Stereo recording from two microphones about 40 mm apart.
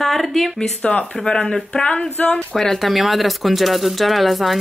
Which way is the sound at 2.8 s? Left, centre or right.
Centre.